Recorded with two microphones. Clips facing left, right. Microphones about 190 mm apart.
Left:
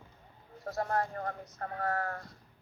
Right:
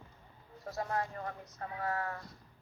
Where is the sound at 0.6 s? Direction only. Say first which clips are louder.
Left 4 dB; 55° left (ahead or behind).